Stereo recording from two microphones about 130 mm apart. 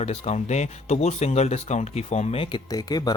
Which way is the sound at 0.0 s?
55° left (ahead or behind).